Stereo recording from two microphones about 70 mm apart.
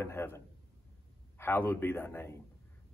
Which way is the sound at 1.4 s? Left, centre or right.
Left.